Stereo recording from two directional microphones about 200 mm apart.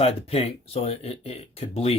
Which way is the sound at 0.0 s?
30° left (ahead or behind).